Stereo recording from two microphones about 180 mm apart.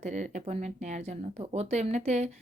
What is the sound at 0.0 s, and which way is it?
A woman's voice, 40° right (ahead or behind).